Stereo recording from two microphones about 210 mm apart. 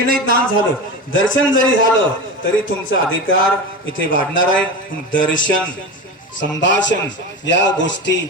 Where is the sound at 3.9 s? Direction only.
65° left (ahead or behind).